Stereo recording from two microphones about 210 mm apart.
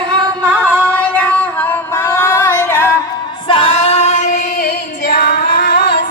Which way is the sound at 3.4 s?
25° left (ahead or behind).